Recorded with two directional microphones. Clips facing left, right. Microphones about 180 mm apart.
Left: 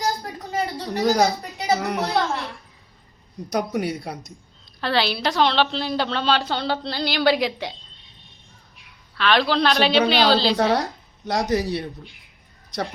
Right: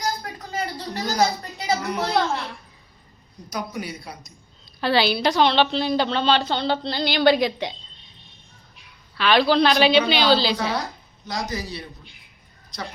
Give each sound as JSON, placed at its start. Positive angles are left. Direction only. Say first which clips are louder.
{"t": 0.4, "sound": "a sound", "louder": "left 3 dB", "side_deg": 20}
{"t": 1.8, "sound": "a woman's voice", "louder": "even", "side_deg": 0}
{"t": 3.5, "sound": "speech", "louder": "left 7 dB", "side_deg": 65}
{"t": 4.8, "sound": "a woman's voice", "louder": "right 2 dB", "side_deg": 0}
{"t": 9.1, "sound": "a woman's voice", "louder": "right 2 dB", "side_deg": -5}
{"t": 10.6, "sound": "speech", "louder": "left 6 dB", "side_deg": 65}